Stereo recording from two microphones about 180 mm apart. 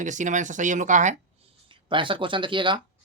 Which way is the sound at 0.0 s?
45° right (ahead or behind).